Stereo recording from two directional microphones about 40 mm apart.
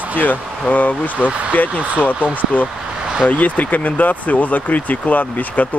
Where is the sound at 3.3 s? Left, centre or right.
Left.